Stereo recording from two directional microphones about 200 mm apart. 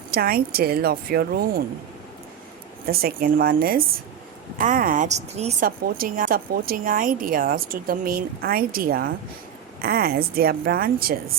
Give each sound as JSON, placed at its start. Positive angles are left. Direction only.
{"t": 0.1, "sound": "speech", "side_deg": -50}
{"t": 2.8, "sound": "a woman's voice", "side_deg": -50}
{"t": 5.6, "sound": "speech", "side_deg": -45}